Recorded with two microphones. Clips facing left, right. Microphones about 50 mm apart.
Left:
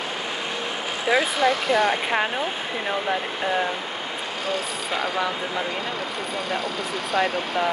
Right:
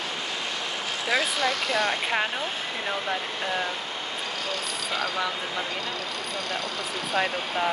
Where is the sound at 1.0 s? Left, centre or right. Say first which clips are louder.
Left 5 dB; centre.